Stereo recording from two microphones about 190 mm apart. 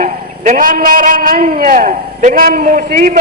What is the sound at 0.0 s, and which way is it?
A man's voice, 40° right (ahead or behind).